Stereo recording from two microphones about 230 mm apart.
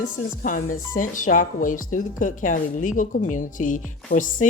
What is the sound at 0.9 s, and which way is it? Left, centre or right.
A woman's voice, left.